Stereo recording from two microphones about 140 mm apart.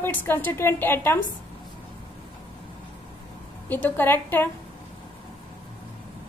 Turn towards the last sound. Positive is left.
turn(degrees=15)  # may be behind; listen again after turning